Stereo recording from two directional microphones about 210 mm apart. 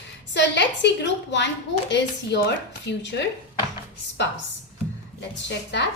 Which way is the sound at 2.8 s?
55° left (ahead or behind).